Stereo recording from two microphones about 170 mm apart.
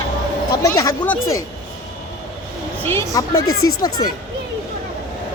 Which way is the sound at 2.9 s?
15° left (ahead or behind).